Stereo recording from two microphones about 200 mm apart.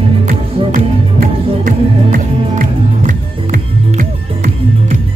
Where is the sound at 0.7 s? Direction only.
45° right (ahead or behind).